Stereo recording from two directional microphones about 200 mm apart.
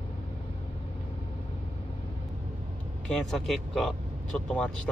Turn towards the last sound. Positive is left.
turn(degrees=5)  # may be behind; listen again after turning